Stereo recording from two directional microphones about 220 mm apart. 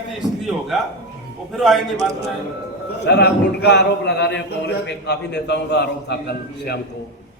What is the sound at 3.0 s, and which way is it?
A man's voice, 50° left (ahead or behind).